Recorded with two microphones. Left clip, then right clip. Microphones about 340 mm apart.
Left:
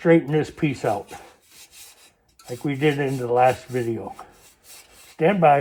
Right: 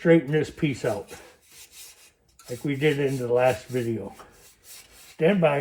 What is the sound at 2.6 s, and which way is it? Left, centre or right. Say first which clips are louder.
Speech: left 2 dB; left.